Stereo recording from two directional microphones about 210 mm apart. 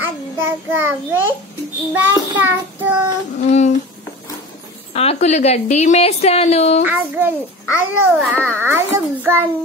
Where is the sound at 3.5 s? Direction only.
35° left (ahead or behind).